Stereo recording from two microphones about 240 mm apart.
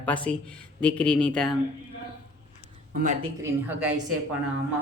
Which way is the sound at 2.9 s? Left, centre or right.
Right.